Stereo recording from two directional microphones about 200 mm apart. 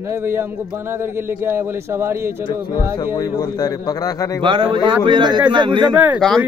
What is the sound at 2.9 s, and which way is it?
A man's voice, 20° left (ahead or behind).